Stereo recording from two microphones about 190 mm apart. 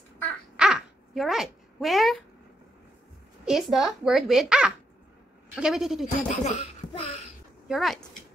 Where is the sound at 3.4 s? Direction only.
Centre (ahead or behind).